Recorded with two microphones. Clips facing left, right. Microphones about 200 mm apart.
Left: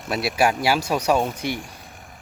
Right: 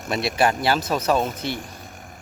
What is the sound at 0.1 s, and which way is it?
A man's voice, 5° left (ahead or behind).